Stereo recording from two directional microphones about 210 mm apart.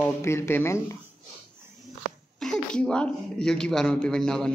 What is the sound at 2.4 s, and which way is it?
Speech, 5° left (ahead or behind).